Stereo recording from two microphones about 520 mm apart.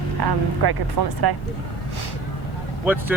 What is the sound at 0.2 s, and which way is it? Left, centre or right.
Speech, right.